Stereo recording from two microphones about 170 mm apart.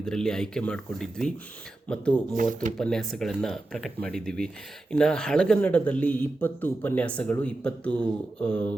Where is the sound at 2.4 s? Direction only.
50° right (ahead or behind).